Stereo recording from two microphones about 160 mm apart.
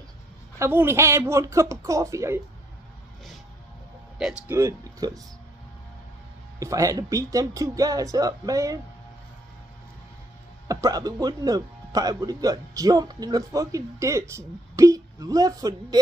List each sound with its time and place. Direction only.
0.6 s speech: 15° right (ahead or behind)
4.5 s speech: 20° right (ahead or behind)
6.6 s speech: 20° right (ahead or behind)
10.7 s speech: 20° right (ahead or behind)